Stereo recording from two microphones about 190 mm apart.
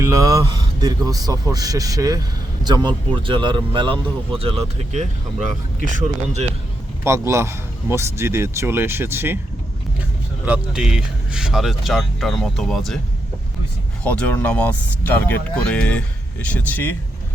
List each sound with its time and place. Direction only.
0.0 s speech: 15° right (ahead or behind); by 6.4 s 40° right (ahead or behind)
7.0 s a man's voice: 15° right (ahead or behind); by 13.0 s centre (ahead or behind)
14.0 s speech: 5° left (ahead or behind)